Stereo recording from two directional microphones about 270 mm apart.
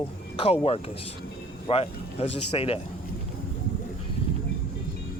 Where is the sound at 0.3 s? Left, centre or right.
Left.